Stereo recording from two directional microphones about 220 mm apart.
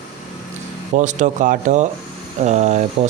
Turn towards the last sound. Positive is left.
turn(degrees=-30)  # may be behind; listen again after turning